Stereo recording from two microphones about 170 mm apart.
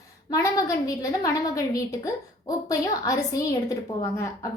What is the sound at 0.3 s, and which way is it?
A woman's voice, 20° left (ahead or behind).